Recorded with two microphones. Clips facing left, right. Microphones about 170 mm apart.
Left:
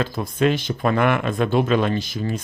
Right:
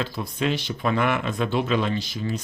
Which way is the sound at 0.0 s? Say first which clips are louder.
Left 6 dB; 50° left (ahead or behind).